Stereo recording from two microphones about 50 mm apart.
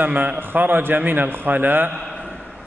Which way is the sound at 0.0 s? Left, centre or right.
Right.